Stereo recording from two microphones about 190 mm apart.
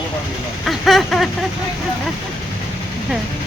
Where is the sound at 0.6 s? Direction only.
Centre (ahead or behind).